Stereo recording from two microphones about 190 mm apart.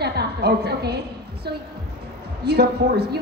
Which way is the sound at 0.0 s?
60° right (ahead or behind).